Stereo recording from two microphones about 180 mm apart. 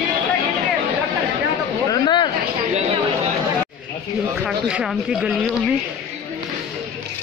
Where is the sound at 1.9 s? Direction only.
25° left (ahead or behind).